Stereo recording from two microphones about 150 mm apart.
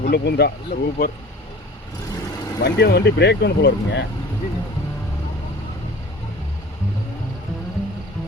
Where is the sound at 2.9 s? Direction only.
90° left.